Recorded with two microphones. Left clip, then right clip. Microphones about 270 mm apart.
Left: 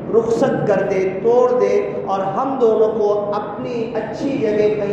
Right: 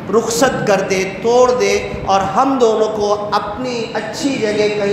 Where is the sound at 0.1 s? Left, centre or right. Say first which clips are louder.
Right 2 dB; right.